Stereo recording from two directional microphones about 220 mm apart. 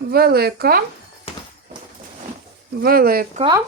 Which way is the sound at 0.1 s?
45° right (ahead or behind).